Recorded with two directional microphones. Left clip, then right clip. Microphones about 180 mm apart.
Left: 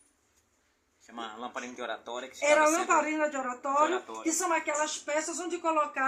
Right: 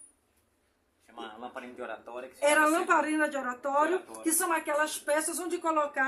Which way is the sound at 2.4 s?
15° right (ahead or behind).